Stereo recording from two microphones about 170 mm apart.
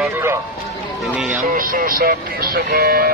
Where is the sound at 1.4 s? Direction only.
55° right (ahead or behind).